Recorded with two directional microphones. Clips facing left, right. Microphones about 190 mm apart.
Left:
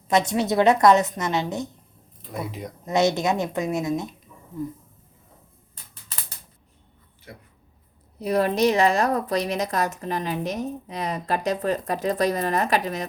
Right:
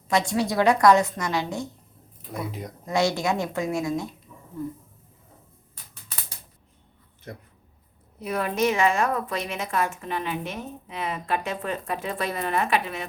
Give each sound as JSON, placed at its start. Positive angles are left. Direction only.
{"t": 0.1, "sound": "a woman's voice", "side_deg": 20}
{"t": 2.3, "sound": "speech", "side_deg": 0}
{"t": 2.8, "sound": "a woman's voice", "side_deg": 20}
{"t": 7.3, "sound": "speech", "side_deg": -45}
{"t": 8.2, "sound": "a woman's voice", "side_deg": 35}